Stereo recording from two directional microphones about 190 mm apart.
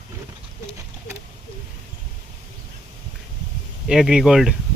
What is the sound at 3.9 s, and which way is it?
Speech, 5° right (ahead or behind).